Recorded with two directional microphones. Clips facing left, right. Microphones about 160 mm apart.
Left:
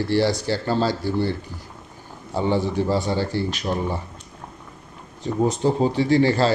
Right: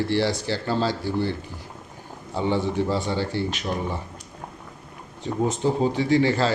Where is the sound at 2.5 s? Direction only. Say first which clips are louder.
Left 2 dB; 40° left (ahead or behind).